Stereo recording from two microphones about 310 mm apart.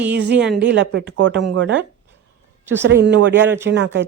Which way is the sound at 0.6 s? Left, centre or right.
Right.